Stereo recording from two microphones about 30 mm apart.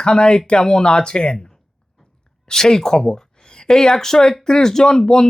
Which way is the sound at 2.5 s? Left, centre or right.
Left.